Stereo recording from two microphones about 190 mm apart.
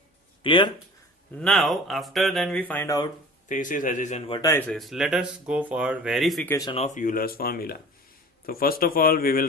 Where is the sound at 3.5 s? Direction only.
45° left (ahead or behind).